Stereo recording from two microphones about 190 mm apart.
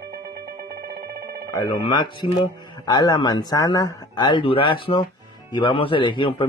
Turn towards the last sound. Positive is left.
turn(degrees=25)  # may be behind; listen again after turning